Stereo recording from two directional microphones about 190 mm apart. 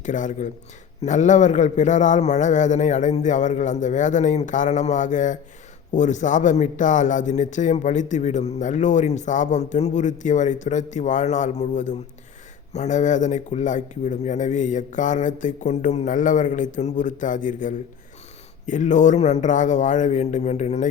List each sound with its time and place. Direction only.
0.0 s a man's voice: 40° left (ahead or behind)